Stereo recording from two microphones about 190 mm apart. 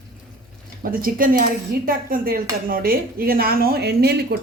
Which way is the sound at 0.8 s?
50° right (ahead or behind).